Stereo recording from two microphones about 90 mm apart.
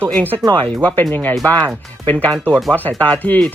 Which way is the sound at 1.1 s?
15° left (ahead or behind).